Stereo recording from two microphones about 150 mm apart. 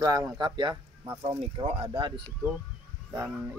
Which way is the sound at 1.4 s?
40° right (ahead or behind).